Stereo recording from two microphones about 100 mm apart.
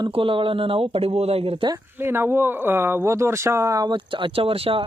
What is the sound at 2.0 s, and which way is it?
Speech, 25° right (ahead or behind).